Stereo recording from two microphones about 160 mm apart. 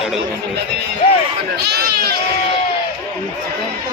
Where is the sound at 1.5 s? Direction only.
85° right.